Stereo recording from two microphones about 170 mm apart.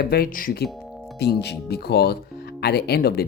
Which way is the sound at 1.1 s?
75° left (ahead or behind).